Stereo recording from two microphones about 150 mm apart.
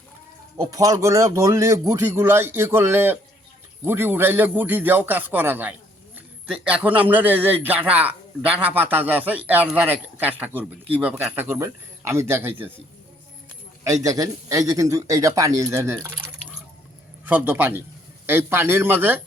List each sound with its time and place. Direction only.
0.6 s speech: 25° right (ahead or behind)
14.0 s speech: 25° right (ahead or behind)
17.2 s speech: 10° right (ahead or behind)